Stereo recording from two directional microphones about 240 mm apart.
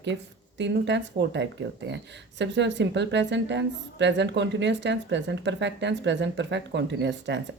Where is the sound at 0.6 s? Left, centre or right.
Right.